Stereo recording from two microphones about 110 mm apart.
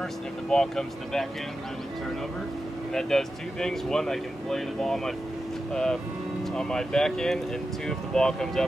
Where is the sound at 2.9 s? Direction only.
5° left (ahead or behind).